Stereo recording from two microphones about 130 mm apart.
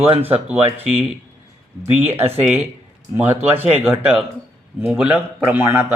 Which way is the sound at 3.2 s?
15° right (ahead or behind).